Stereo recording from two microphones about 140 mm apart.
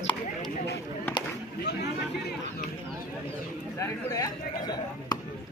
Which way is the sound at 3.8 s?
25° left (ahead or behind).